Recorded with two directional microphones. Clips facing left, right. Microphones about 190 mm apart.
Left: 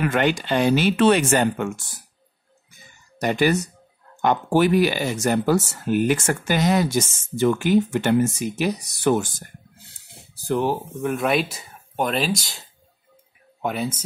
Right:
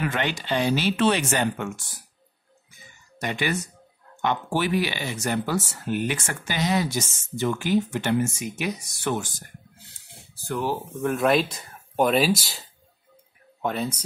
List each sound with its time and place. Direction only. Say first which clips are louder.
0.0 s speech: left 6 dB; 50° left (ahead or behind)
3.2 s speech: left 7 dB; 40° left (ahead or behind)
10.4 s speech: left 6 dB; 25° left (ahead or behind)
11.0 s speech: right 2 dB; centre (ahead or behind)
13.6 s speech: left 2 dB; 10° left (ahead or behind)